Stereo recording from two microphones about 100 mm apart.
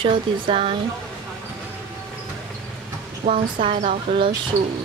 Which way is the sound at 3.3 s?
75° right (ahead or behind).